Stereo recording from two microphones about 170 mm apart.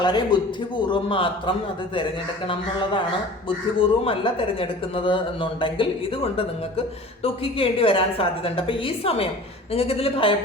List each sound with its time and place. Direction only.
0.0 s a man's voice: 25° left (ahead or behind)
7.2 s a woman's voice: 35° left (ahead or behind)